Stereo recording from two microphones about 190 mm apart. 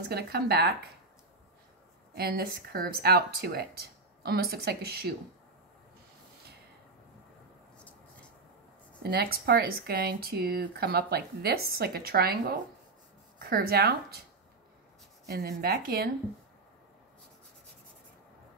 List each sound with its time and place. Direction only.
0.1 s speech: 60° right (ahead or behind)
2.1 s speech: 55° right (ahead or behind)
9.0 s speech: 55° right (ahead or behind)
15.2 s speech: 55° right (ahead or behind)